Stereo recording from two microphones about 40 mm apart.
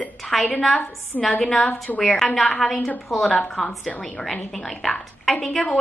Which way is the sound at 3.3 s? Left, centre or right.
Left.